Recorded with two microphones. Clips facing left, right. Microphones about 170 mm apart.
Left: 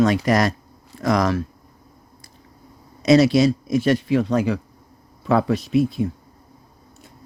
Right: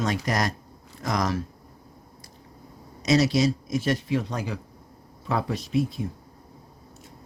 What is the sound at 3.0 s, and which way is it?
Speech, 60° left (ahead or behind).